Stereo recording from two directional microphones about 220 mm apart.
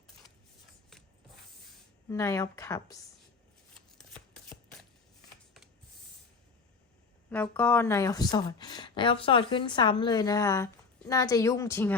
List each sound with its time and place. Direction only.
2.0 s speech: 15° left (ahead or behind)
7.3 s speech: 5° left (ahead or behind)